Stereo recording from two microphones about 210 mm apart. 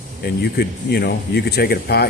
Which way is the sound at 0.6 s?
50° left (ahead or behind).